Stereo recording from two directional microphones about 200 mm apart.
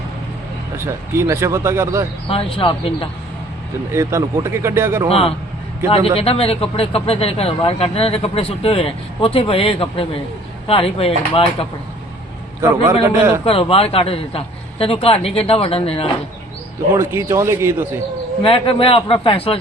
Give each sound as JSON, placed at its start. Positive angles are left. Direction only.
{"t": 0.8, "sound": "speech", "side_deg": -15}
{"t": 2.2, "sound": "speech", "side_deg": 30}
{"t": 3.9, "sound": "speech", "side_deg": -15}
{"t": 5.0, "sound": "speech", "side_deg": 30}
{"t": 12.6, "sound": "speech", "side_deg": -15}
{"t": 13.4, "sound": "speech", "side_deg": 30}
{"t": 16.9, "sound": "speech", "side_deg": -10}
{"t": 18.4, "sound": "speech", "side_deg": 25}